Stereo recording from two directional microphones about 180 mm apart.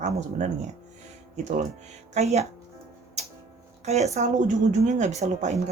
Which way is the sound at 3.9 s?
40° right (ahead or behind).